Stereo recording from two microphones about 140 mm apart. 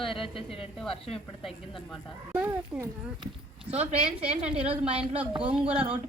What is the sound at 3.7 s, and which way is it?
Speech, 45° right (ahead or behind).